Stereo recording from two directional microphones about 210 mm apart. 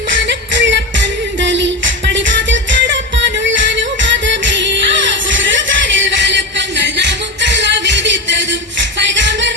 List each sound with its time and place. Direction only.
0.1 s music: 60° right (ahead or behind)